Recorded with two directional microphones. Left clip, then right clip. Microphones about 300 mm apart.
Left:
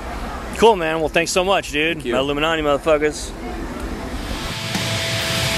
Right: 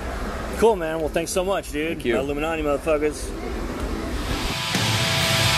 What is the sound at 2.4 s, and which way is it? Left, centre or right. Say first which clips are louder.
Speech: left 5 dB; left.